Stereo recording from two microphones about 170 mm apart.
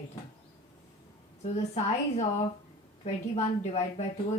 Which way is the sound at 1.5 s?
40° left (ahead or behind).